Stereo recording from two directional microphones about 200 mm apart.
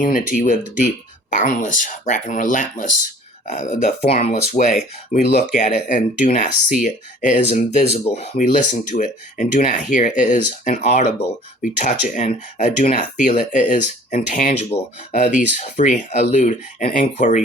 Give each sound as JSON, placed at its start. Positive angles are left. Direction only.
{"t": 0.0, "sound": "speech", "side_deg": 40}